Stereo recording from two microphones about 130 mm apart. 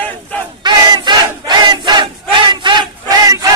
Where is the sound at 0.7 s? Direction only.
35° right (ahead or behind).